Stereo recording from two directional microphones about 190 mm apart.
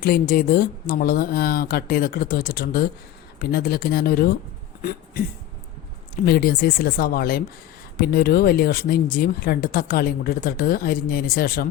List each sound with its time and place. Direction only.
0.0 s speech: 50° left (ahead or behind)
4.8 s a sound: 55° left (ahead or behind)
6.2 s speech: 55° left (ahead or behind)